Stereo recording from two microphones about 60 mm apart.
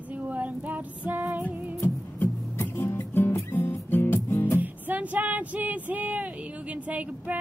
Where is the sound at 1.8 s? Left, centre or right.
Left.